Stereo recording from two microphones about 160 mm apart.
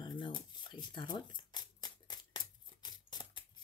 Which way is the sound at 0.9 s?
30° left (ahead or behind).